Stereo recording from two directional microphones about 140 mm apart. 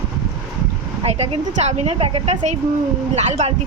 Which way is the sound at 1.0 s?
45° right (ahead or behind).